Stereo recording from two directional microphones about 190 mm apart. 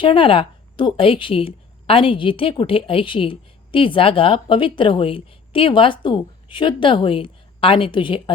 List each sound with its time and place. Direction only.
0.0 s a woman's voice: 30° left (ahead or behind)